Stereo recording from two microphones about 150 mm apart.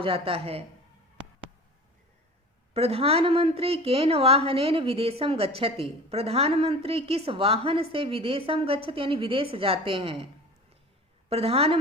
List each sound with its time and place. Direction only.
0.0 s a woman's voice: 40° right (ahead or behind)
2.7 s a woman's voice: 40° right (ahead or behind)
11.3 s a woman's voice: 40° right (ahead or behind)